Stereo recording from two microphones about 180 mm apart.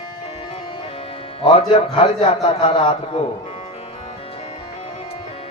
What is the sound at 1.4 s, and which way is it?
Speech, 30° left (ahead or behind).